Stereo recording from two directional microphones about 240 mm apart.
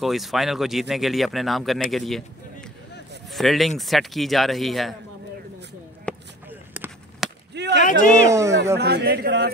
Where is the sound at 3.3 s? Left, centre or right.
Centre.